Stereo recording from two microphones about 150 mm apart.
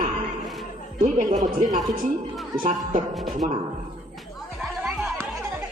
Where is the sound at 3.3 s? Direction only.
55° right (ahead or behind).